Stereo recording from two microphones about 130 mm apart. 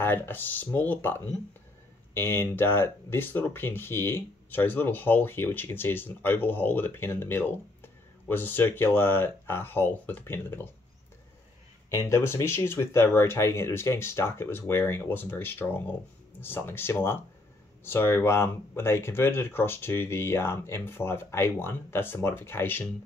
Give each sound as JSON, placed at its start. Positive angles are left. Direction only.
{"t": 0.0, "sound": "speech", "side_deg": 15}
{"t": 11.9, "sound": "speech", "side_deg": 20}